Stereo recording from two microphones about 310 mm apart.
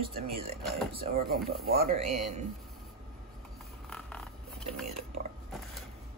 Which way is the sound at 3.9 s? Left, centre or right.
Centre.